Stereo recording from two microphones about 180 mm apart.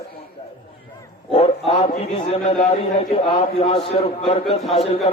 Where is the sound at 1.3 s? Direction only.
35° left (ahead or behind).